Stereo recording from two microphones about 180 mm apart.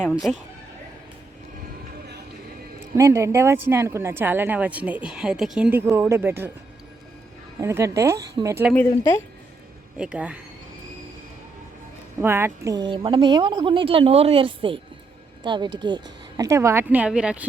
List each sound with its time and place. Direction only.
0.0 s speech: centre (ahead or behind)
2.9 s speech: 15° right (ahead or behind)
7.6 s speech: 15° right (ahead or behind)
10.0 s speech: 5° right (ahead or behind)
12.2 s a woman's voice: 15° right (ahead or behind)